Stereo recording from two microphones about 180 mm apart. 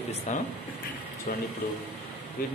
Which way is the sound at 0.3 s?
45° left (ahead or behind).